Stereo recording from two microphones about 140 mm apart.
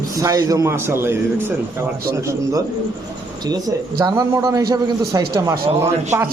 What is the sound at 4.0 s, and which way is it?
A man's voice, 25° right (ahead or behind).